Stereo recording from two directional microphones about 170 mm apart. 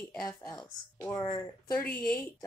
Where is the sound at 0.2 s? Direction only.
20° left (ahead or behind).